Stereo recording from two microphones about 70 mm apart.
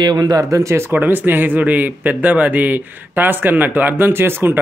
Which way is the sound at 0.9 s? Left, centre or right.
Right.